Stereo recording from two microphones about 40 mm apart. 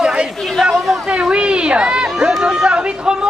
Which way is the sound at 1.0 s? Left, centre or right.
Right.